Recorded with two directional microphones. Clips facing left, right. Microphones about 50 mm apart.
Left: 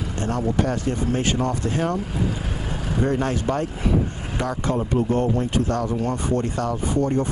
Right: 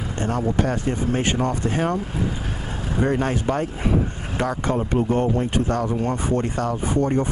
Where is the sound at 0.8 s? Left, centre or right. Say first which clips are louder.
Even; right.